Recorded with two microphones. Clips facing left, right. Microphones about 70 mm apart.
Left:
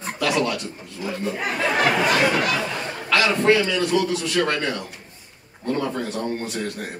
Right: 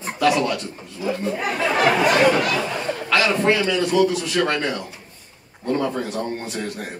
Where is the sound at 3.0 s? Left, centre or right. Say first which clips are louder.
Left 1 dB; centre.